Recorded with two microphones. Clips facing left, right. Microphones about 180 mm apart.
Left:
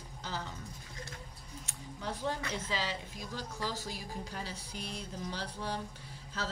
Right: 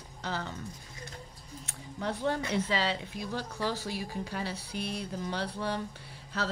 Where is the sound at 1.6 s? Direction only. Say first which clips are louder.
Right 6 dB; 65° right (ahead or behind).